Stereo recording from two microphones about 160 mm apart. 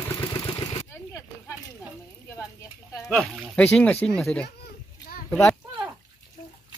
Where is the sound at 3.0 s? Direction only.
Centre (ahead or behind).